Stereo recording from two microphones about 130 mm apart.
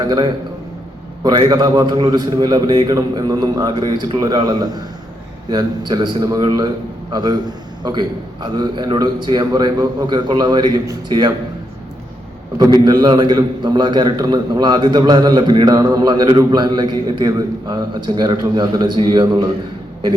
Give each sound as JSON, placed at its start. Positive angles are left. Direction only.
{"t": 0.0, "sound": "a man's voice", "side_deg": -35}
{"t": 12.5, "sound": "a man's voice", "side_deg": -30}